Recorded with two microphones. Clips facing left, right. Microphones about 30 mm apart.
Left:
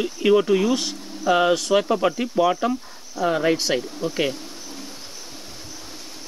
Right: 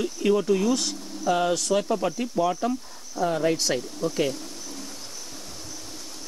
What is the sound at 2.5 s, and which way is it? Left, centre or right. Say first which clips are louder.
Speech: left 4 dB; left.